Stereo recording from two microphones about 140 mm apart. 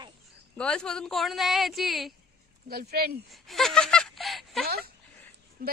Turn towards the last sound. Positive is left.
turn(degrees=-90)